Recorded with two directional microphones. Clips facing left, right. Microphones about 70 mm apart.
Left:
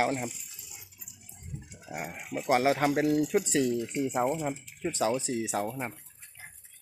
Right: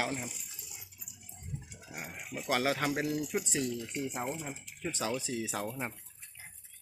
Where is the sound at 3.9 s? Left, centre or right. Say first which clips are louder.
Left 8 dB; centre.